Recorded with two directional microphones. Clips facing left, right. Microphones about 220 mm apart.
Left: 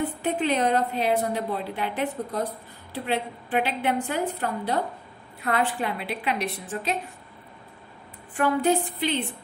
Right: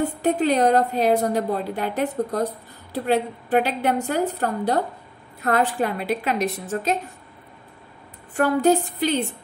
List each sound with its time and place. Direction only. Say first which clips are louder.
0.0 s a woman's voice: right 5 dB; 40° right (ahead or behind)
8.4 s a woman's voice: right 4 dB; 40° right (ahead or behind)